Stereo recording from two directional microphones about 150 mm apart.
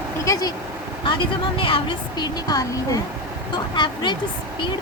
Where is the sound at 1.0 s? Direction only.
35° left (ahead or behind).